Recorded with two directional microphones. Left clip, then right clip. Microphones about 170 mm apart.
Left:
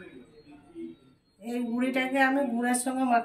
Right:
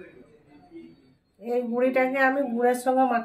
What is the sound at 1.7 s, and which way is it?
A woman's voice, 55° right (ahead or behind).